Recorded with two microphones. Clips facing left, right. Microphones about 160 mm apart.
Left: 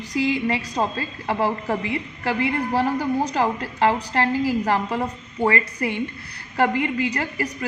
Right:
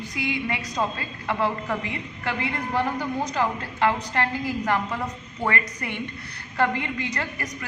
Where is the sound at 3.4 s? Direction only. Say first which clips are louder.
Even; 25° left (ahead or behind).